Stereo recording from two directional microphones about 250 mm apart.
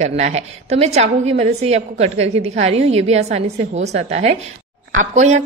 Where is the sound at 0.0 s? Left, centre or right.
Right.